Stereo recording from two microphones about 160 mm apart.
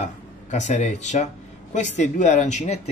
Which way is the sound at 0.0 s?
50° left (ahead or behind).